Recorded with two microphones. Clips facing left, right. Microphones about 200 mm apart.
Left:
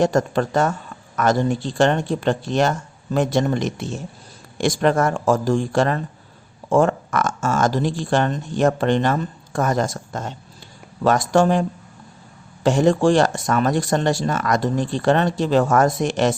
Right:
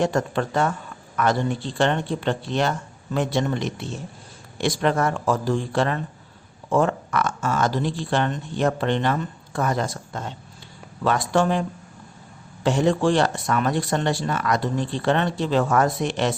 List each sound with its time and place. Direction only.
0.0 s speech: 40° left (ahead or behind)
12.6 s speech: 45° left (ahead or behind)